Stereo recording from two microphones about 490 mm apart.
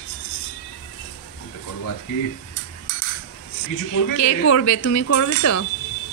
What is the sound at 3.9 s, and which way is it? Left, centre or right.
Speech, left.